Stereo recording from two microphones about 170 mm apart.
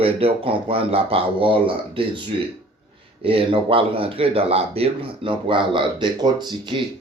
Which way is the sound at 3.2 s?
30° right (ahead or behind).